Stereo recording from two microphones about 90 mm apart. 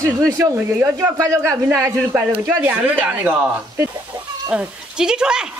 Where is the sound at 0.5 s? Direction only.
25° right (ahead or behind).